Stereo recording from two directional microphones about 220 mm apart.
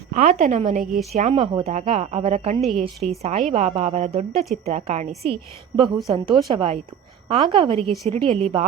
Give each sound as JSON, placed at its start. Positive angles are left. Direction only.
{"t": 0.1, "sound": "a woman's voice", "side_deg": -35}
{"t": 2.6, "sound": "a woman's voice", "side_deg": 0}
{"t": 3.2, "sound": "a woman's voice", "side_deg": -30}